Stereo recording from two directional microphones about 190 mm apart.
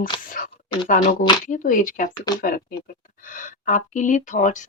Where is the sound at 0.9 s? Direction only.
45° left (ahead or behind).